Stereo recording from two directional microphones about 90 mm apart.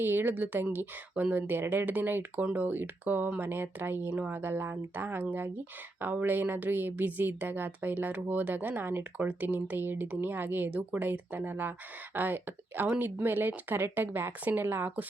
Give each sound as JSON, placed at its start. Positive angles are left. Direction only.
{"t": 0.0, "sound": "a woman's voice", "side_deg": -25}